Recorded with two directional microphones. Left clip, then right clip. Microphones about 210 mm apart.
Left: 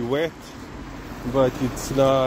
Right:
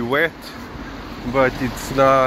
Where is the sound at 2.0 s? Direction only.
15° left (ahead or behind).